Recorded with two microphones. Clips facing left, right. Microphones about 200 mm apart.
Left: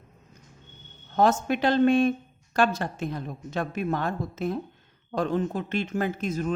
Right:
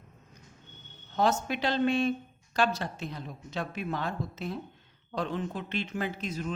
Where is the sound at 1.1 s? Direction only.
50° left (ahead or behind).